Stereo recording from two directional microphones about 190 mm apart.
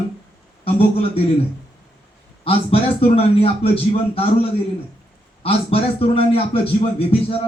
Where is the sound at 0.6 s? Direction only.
30° left (ahead or behind).